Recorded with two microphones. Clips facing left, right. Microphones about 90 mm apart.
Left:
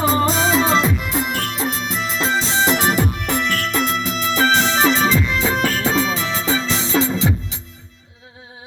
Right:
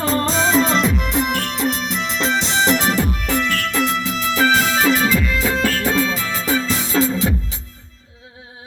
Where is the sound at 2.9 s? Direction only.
20° left (ahead or behind).